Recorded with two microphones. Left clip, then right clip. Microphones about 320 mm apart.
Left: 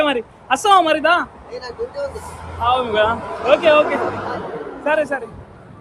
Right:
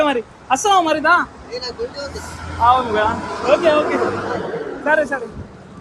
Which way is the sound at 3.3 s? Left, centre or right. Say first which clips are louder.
Even; left.